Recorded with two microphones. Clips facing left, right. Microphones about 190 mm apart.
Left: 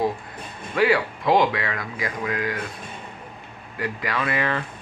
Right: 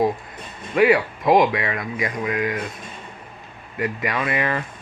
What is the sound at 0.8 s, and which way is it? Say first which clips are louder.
Speech: right 4 dB; 20° right (ahead or behind).